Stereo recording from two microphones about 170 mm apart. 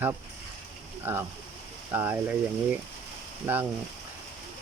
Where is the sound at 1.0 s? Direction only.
10° right (ahead or behind).